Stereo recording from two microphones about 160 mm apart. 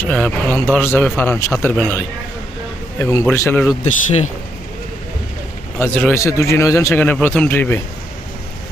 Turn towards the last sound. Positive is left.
turn(degrees=15)  # may be behind; listen again after turning